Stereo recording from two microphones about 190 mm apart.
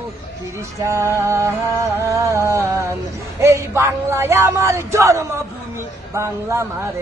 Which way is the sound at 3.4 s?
15° right (ahead or behind).